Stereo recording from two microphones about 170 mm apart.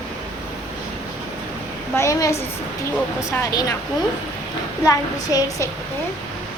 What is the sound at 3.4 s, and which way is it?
Speech, 20° left (ahead or behind).